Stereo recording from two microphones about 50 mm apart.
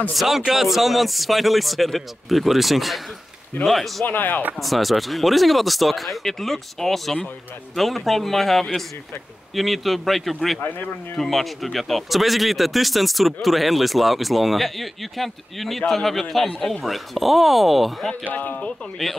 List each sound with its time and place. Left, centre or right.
0.1 s speech: centre
4.0 s speech: left
4.6 s speech: centre
10.6 s speech: left
11.1 s speech: centre
18.3 s speech: left
19.0 s speech: centre